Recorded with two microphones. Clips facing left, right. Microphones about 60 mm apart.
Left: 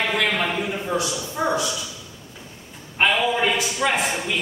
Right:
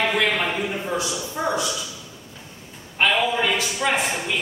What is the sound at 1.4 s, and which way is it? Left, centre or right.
Speech, centre.